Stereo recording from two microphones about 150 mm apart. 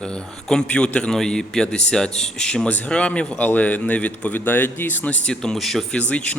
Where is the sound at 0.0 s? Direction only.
5° left (ahead or behind).